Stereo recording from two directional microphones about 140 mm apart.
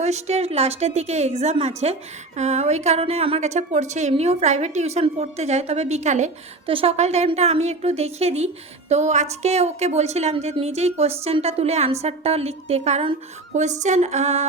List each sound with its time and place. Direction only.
0.0 s a woman's voice: 55° right (ahead or behind)
6.7 s a woman's voice: 45° right (ahead or behind)